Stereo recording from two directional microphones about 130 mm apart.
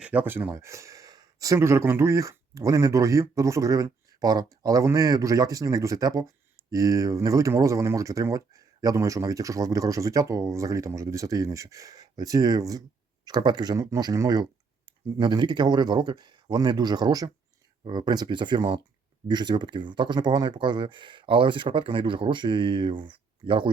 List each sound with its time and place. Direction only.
0.0 s speech: 10° right (ahead or behind); by 23.7 s 40° right (ahead or behind)